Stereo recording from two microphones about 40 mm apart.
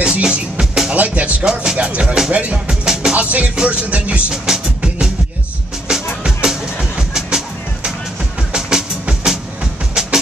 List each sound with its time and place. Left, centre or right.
0.0 s music: right
0.9 s music: right
1.4 s speech: centre
2.3 s music: right
2.7 s music: centre
3.2 s music: right
4.3 s music: centre
10.0 s music: centre